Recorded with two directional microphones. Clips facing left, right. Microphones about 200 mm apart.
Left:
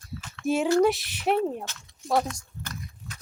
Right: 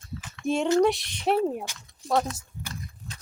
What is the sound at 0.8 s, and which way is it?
Speech, 5° left (ahead or behind).